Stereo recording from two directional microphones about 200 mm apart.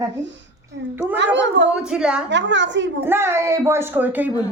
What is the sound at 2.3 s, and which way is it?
Speech, 65° right (ahead or behind).